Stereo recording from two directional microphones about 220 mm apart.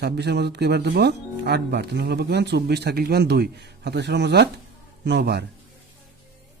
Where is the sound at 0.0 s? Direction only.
50° right (ahead or behind).